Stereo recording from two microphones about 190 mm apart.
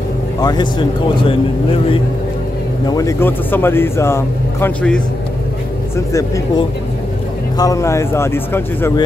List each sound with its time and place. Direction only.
0.4 s speech: 20° left (ahead or behind)
2.9 s speech: 15° left (ahead or behind)